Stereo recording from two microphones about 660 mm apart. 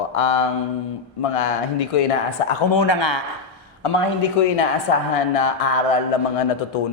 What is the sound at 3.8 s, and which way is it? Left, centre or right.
A woman's voice, left.